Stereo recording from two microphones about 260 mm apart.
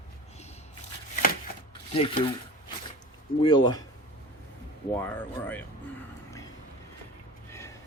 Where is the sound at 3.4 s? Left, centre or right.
Centre.